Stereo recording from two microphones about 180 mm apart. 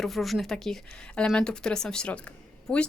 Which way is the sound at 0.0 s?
Centre (ahead or behind).